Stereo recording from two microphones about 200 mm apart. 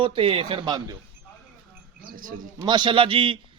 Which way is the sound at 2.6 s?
25° right (ahead or behind).